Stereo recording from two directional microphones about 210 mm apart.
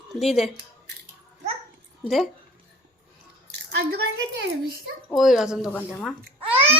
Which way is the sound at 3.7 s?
50° right (ahead or behind).